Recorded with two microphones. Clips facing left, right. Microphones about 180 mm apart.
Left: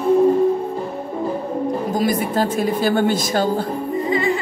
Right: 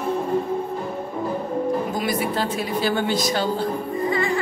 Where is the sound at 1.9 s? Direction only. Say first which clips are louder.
Left 4 dB; 40° left (ahead or behind).